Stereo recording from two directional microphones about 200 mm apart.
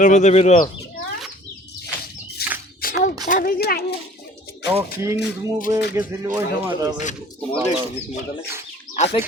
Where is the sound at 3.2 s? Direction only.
45° left (ahead or behind).